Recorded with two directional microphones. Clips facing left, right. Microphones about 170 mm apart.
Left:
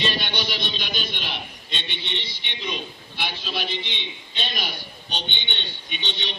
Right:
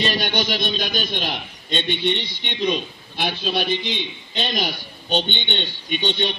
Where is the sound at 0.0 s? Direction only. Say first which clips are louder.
Right 5 dB; 45° right (ahead or behind).